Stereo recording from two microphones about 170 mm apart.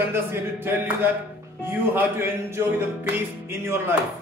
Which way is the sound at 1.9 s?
15° right (ahead or behind).